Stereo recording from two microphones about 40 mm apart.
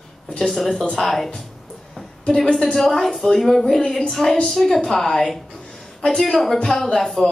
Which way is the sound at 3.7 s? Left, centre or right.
Left.